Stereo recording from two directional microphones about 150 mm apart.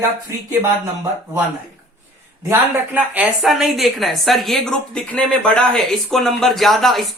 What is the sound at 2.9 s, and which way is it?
A woman's voice, 5° right (ahead or behind).